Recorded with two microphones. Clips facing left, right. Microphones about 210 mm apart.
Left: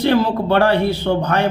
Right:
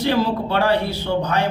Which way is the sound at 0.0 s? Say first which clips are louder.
Left 4 dB; 55° left (ahead or behind).